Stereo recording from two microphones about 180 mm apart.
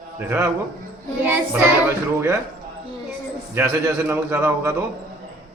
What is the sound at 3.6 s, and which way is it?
A man's voice, 15° right (ahead or behind).